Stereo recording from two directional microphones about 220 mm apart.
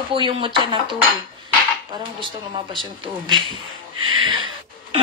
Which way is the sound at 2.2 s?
25° right (ahead or behind).